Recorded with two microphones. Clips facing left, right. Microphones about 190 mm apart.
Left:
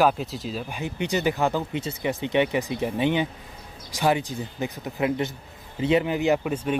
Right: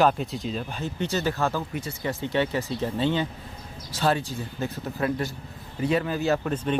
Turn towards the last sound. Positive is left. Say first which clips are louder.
# left 2 dB
turn(degrees=10)  # may be behind; listen again after turning